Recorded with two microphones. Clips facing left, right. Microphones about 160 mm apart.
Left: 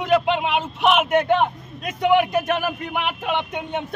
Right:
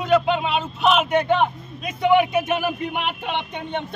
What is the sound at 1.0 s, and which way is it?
A man's voice, 5° left (ahead or behind).